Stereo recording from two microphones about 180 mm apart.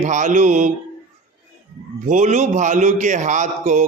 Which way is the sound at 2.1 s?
40° right (ahead or behind).